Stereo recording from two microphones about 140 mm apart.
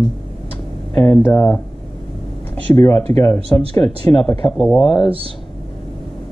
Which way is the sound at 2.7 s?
25° left (ahead or behind).